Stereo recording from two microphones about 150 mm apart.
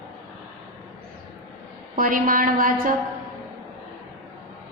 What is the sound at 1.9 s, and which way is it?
A woman's voice, 65° right (ahead or behind).